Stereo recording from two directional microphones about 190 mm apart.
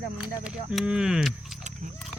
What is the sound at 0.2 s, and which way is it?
Speech, 5° right (ahead or behind).